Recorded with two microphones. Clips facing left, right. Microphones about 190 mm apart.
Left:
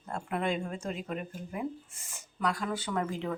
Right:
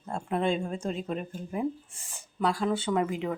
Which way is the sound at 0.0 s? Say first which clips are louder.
Right 4 dB; 25° right (ahead or behind).